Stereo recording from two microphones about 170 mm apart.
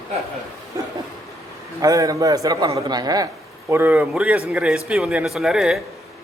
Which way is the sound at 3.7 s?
10° right (ahead or behind).